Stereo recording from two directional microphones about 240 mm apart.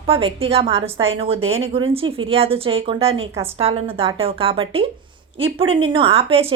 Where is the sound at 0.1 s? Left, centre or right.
Right.